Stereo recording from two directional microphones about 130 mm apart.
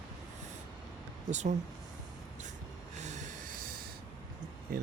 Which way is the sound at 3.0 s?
65° right (ahead or behind).